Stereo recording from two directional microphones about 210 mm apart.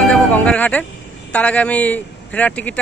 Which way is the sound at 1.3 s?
5° left (ahead or behind).